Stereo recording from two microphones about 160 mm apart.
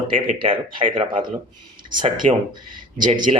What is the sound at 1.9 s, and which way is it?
Speech, 60° right (ahead or behind).